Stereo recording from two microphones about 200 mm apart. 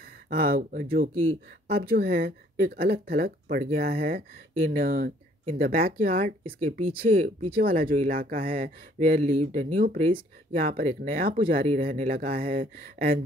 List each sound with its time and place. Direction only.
0.3 s speech: 50° right (ahead or behind)